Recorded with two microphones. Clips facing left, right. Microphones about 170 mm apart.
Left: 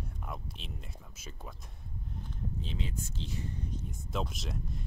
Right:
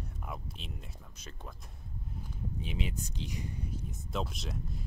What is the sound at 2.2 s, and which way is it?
Speech, 15° right (ahead or behind).